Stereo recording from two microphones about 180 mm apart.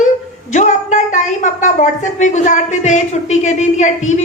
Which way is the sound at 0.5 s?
45° left (ahead or behind).